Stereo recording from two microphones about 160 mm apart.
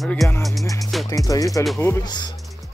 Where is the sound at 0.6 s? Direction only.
20° left (ahead or behind).